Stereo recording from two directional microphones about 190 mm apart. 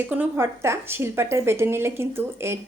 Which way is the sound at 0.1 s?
10° right (ahead or behind).